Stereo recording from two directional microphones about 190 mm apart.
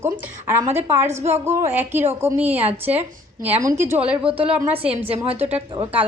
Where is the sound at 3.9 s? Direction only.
5° right (ahead or behind).